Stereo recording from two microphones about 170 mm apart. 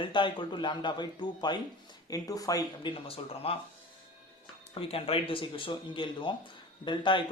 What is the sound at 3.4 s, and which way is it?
Speech, 35° left (ahead or behind).